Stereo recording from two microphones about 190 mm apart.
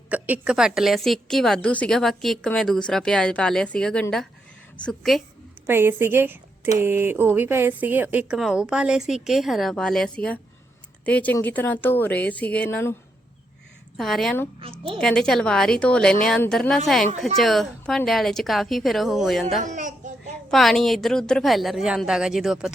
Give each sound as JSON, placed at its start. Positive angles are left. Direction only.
{"t": 0.1, "sound": "a woman's voice", "side_deg": -5}
{"t": 5.6, "sound": "a woman's voice", "side_deg": -10}
{"t": 13.9, "sound": "a woman's voice", "side_deg": 0}
{"t": 14.6, "sound": "a woman's voice", "side_deg": -30}
{"t": 14.9, "sound": "a woman's voice", "side_deg": 5}
{"t": 19.6, "sound": "speech", "side_deg": -40}
{"t": 20.5, "sound": "a woman's voice", "side_deg": 0}